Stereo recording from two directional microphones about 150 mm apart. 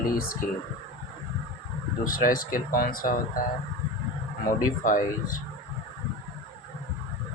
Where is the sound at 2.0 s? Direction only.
70° left (ahead or behind).